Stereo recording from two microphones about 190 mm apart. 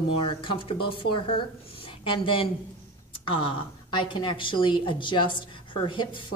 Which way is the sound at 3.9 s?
25° left (ahead or behind).